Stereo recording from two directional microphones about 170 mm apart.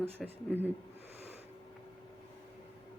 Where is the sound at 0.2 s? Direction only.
Centre (ahead or behind).